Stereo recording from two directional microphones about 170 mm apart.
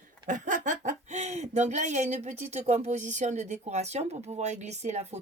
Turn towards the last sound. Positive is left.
turn(degrees=-40)  # may be behind; listen again after turning